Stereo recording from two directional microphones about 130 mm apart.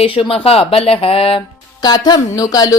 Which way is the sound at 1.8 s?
35° left (ahead or behind).